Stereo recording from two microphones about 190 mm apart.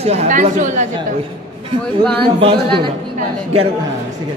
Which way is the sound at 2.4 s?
25° right (ahead or behind).